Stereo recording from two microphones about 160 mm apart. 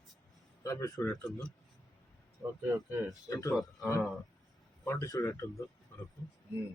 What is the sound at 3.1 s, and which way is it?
Speech, 20° left (ahead or behind).